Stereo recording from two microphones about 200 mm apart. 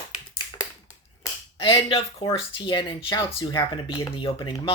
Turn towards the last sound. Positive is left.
turn(degrees=20)  # may be behind; listen again after turning